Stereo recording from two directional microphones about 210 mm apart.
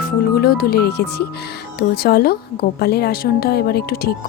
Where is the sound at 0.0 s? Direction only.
45° left (ahead or behind).